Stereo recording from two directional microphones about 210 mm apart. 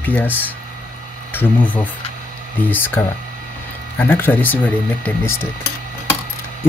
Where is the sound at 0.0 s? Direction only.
10° left (ahead or behind).